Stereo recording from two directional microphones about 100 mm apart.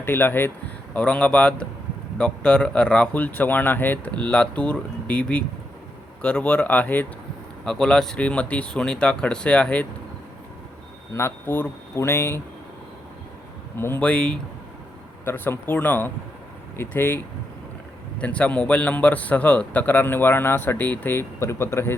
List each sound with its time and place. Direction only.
0.0 s a man's voice: 20° left (ahead or behind)
7.6 s a man's voice: 5° left (ahead or behind)
11.1 s speech: 25° left (ahead or behind)
13.7 s speech: 25° left (ahead or behind)
14.1 s a man's voice: 10° left (ahead or behind)
15.2 s speech: 25° left (ahead or behind)
18.2 s a man's voice: 15° left (ahead or behind)